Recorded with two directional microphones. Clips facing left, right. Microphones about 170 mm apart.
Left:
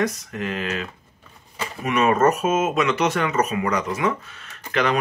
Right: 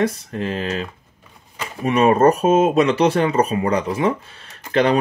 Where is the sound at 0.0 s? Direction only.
30° right (ahead or behind).